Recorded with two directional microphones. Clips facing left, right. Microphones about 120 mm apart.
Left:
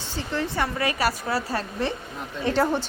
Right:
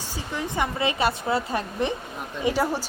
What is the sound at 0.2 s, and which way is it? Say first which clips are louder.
A woman's voice: left 1 dB; 15° right (ahead or behind).